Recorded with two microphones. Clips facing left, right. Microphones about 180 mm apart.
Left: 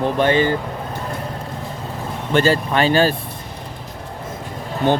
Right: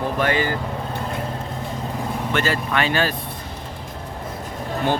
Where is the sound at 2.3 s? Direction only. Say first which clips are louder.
Left 7 dB; 30° left (ahead or behind).